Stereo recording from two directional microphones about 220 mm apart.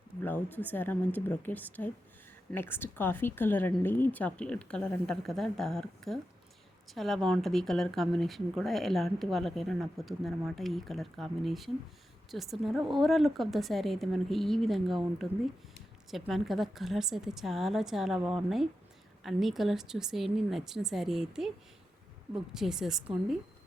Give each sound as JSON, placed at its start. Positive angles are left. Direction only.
{"t": 0.2, "sound": "a woman's voice", "side_deg": 10}
{"t": 22.5, "sound": "speech", "side_deg": 0}